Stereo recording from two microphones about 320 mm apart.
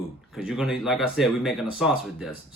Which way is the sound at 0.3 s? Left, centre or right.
Centre.